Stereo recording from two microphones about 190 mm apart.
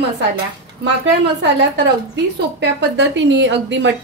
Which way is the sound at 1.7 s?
65° right (ahead or behind).